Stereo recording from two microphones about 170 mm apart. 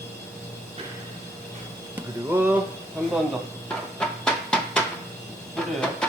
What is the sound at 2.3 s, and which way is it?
Speech, 10° right (ahead or behind).